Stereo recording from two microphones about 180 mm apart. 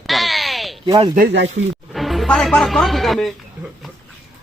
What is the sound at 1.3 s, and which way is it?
Speech, 75° right (ahead or behind).